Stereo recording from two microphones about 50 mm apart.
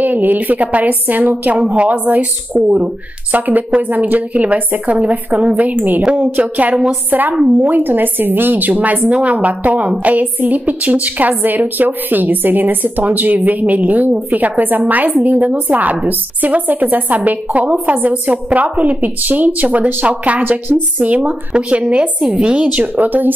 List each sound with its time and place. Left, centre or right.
0.0 s a woman's voice: right
1.6 s a woman's voice: right